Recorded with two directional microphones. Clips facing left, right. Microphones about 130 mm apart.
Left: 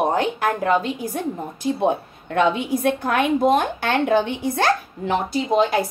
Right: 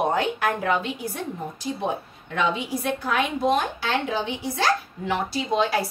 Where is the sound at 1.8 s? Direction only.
55° left (ahead or behind).